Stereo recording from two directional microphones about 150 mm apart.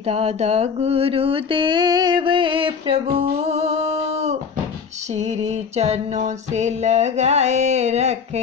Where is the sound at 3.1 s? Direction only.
40° right (ahead or behind).